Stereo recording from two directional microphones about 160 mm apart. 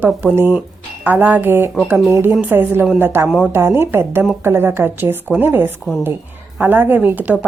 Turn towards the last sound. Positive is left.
turn(degrees=-10)  # may be behind; listen again after turning